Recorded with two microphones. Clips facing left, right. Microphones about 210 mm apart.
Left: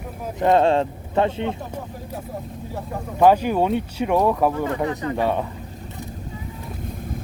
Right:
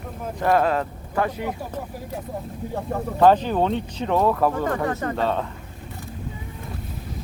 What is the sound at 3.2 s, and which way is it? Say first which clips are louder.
Speech: left 1 dB; 10° left (ahead or behind).